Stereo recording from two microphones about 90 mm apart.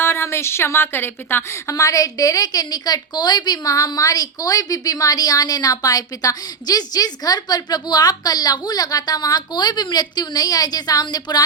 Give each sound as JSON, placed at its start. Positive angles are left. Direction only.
{"t": 0.0, "sound": "a woman's voice", "side_deg": 30}